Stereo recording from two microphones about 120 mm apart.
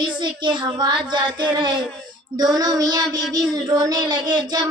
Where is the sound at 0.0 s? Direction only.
40° right (ahead or behind).